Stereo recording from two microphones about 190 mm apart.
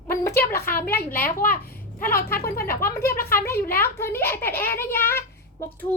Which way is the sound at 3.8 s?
15° left (ahead or behind).